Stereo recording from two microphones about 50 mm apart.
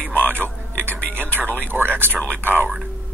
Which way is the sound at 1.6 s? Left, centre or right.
Right.